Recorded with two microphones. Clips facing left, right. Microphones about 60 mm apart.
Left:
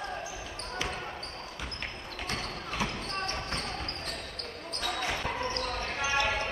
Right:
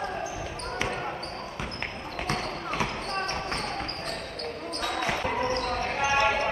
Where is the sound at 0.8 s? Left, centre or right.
Right.